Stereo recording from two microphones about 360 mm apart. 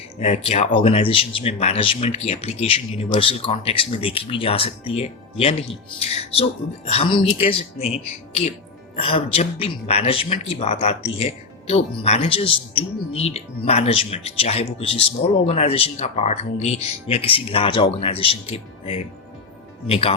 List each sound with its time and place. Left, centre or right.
0.2 s speech: centre
9.0 s speech: centre